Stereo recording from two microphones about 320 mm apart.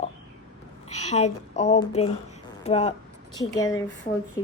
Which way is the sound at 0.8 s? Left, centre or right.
Left.